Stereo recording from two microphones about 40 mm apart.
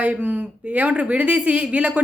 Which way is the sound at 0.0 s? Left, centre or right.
Right.